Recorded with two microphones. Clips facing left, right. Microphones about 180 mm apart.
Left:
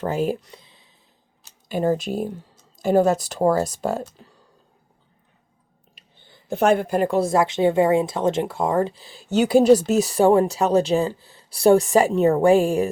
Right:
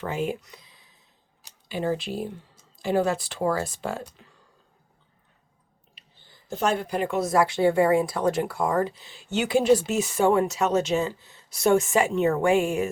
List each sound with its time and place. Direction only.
0.0 s speech: 40° left (ahead or behind)
1.6 s speech: 45° left (ahead or behind)
6.5 s speech: 60° left (ahead or behind)
7.2 s speech: 25° left (ahead or behind)